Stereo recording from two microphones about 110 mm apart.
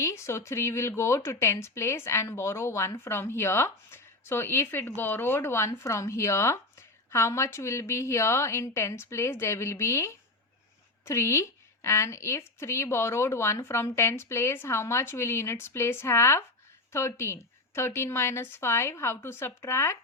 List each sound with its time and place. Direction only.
0.0 s speech: 25° left (ahead or behind)